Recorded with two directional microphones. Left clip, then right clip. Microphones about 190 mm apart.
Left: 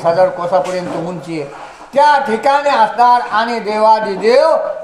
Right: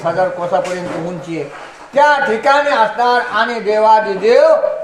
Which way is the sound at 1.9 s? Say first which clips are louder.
Left 1 dB; 20° left (ahead or behind).